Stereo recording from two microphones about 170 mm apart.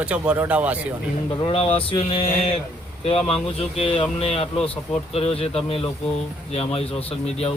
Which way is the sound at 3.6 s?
35° left (ahead or behind).